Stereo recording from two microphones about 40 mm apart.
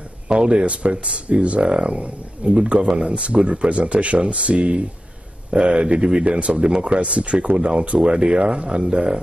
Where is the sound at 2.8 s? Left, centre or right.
Centre.